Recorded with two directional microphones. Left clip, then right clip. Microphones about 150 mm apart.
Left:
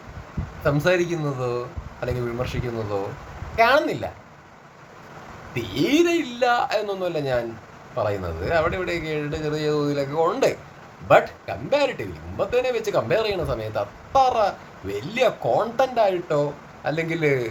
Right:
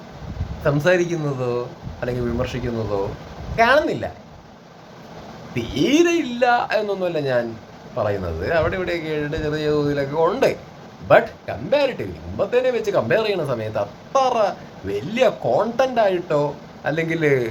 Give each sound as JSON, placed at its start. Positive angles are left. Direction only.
{"t": 0.6, "sound": "speech", "side_deg": 10}
{"t": 5.5, "sound": "speech", "side_deg": 5}